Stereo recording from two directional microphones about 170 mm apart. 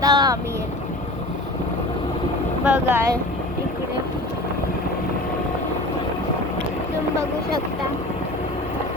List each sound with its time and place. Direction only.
0.0 s vehicle: 20° right (ahead or behind)
2.6 s speech: 10° right (ahead or behind)